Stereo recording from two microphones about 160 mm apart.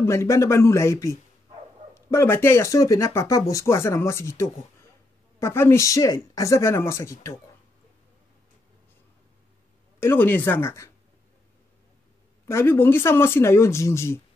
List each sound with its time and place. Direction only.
0.0 s speech: 15° left (ahead or behind)
9.9 s speech: 15° left (ahead or behind)
12.4 s speech: 15° left (ahead or behind)